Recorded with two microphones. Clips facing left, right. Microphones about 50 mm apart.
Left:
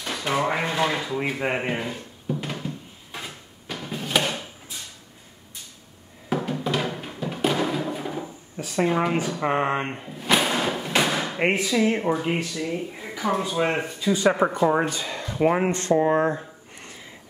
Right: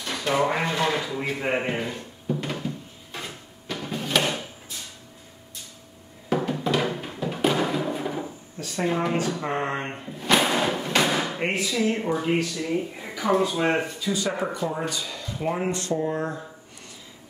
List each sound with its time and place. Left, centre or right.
0.0 s drawer open or close: centre
0.3 s speech: centre
1.4 s drawer open or close: centre
6.3 s music: centre
8.5 s speech: centre
9.9 s a sound: centre
11.3 s speech: left
12.1 s speech: centre
12.6 s speech: centre
14.1 s speech: left